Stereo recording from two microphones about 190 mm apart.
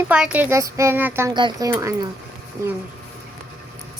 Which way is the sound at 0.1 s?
5° right (ahead or behind).